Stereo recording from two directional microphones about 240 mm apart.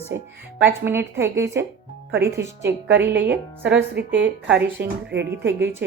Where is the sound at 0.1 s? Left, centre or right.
Right.